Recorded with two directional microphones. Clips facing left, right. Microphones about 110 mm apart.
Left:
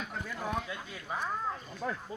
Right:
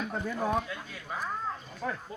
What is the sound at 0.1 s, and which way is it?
Speech, 20° right (ahead or behind).